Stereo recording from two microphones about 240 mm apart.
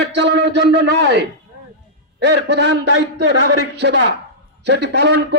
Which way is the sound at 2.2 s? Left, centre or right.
Right.